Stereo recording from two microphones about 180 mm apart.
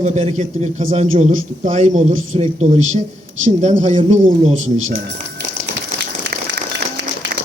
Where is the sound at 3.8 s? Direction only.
40° right (ahead or behind).